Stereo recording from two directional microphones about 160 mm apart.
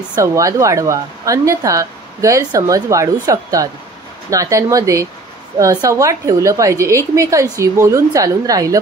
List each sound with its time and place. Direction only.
0.1 s a woman's voice: 20° right (ahead or behind)